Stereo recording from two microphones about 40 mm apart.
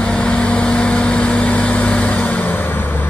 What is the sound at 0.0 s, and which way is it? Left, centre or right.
Vehicle, left.